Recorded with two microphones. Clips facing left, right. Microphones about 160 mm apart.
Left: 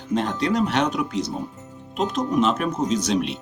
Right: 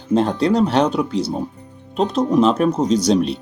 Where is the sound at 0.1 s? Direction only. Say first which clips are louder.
Right 6 dB; 30° right (ahead or behind).